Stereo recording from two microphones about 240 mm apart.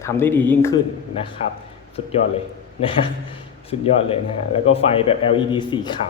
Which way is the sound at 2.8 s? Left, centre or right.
Left.